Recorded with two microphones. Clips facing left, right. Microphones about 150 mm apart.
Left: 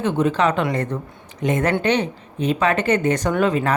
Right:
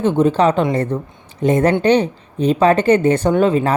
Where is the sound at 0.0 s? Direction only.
30° right (ahead or behind).